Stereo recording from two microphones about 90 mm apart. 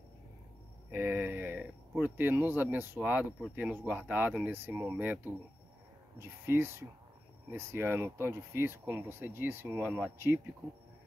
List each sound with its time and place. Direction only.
0.9 s speech: 25° right (ahead or behind)